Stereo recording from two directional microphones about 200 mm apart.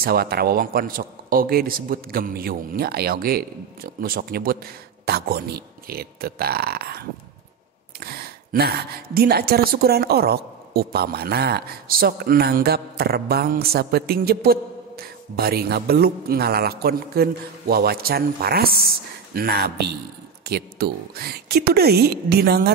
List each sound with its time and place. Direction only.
0.0 s a woman's voice: 50° right (ahead or behind)